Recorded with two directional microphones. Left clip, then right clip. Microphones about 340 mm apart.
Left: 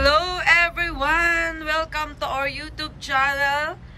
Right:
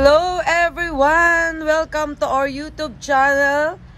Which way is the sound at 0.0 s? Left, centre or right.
Centre.